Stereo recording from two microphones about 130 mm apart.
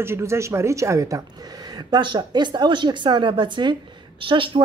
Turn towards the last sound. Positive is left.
turn(degrees=-40)  # may be behind; listen again after turning